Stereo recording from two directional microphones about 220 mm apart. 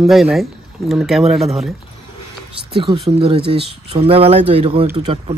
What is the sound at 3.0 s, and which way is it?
Speech, 25° right (ahead or behind).